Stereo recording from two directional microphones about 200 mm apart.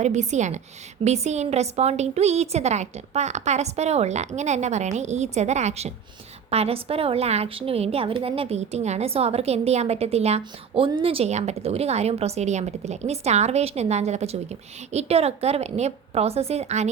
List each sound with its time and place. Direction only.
0.0 s a woman's voice: 35° right (ahead or behind)